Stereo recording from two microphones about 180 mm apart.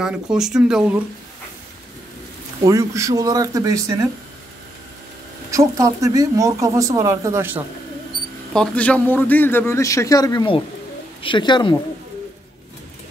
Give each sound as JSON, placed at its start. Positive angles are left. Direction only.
{"t": 0.0, "sound": "speech", "side_deg": -5}
{"t": 2.6, "sound": "speech", "side_deg": -20}
{"t": 5.5, "sound": "speech", "side_deg": -15}
{"t": 8.5, "sound": "a man's voice", "side_deg": 5}